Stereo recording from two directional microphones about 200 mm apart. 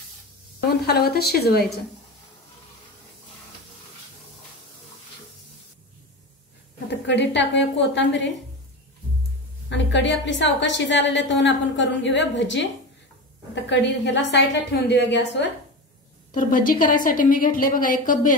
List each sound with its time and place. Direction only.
0.8 s a woman's voice: 50° left (ahead or behind)
6.9 s a woman's voice: 60° left (ahead or behind)
9.7 s a woman's voice: 65° left (ahead or behind)
13.7 s a woman's voice: 60° left (ahead or behind)
16.3 s a woman's voice: 45° left (ahead or behind)